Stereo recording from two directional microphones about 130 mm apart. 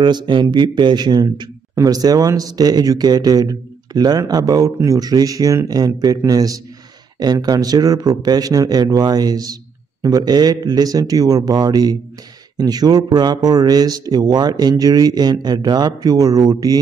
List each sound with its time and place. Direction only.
0.0 s a man's voice: 35° right (ahead or behind)